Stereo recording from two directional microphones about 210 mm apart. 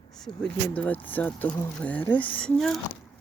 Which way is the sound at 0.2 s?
5° left (ahead or behind).